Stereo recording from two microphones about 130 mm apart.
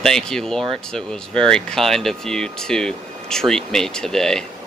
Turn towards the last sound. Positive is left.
turn(degrees=5)  # may be behind; listen again after turning